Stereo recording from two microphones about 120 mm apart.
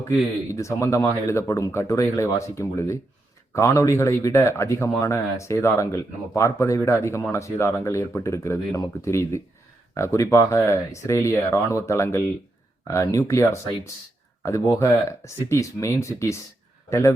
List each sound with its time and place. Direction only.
0.0 s speech: 25° left (ahead or behind)